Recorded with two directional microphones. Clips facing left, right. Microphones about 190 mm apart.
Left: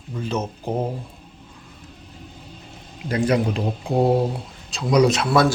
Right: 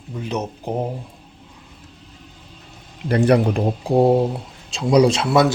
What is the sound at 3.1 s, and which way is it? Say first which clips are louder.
Speech: right 4 dB; 60° right (ahead or behind).